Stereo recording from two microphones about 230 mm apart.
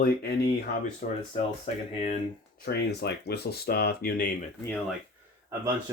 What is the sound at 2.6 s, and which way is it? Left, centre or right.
Speech, left.